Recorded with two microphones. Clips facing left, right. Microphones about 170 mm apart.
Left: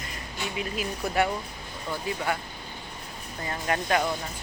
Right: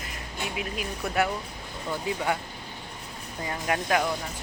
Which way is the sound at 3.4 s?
5° right (ahead or behind).